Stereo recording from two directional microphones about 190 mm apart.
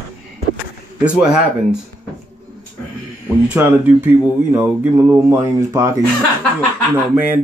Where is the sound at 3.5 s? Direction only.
10° right (ahead or behind).